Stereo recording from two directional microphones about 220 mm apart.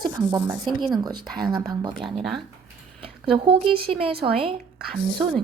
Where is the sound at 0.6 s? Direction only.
20° right (ahead or behind).